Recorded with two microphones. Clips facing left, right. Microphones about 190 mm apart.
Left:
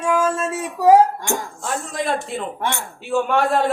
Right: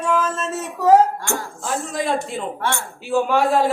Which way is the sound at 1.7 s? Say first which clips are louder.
Right 1 dB; centre (ahead or behind).